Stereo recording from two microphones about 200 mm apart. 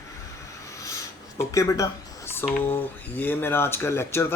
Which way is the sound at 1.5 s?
15° left (ahead or behind).